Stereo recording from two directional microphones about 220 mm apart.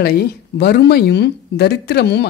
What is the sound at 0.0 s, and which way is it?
Speech, 45° left (ahead or behind).